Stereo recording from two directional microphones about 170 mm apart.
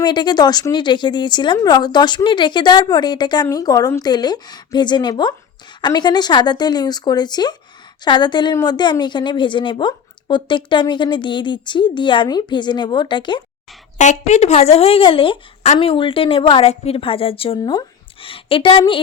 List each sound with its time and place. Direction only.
0.0 s a woman's voice: 25° left (ahead or behind)
14.0 s a woman's voice: 45° left (ahead or behind)